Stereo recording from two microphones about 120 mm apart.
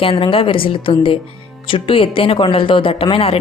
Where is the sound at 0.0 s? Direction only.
50° left (ahead or behind).